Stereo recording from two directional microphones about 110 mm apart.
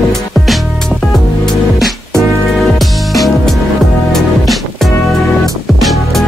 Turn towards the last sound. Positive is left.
turn(degrees=0)  # may be behind; listen again after turning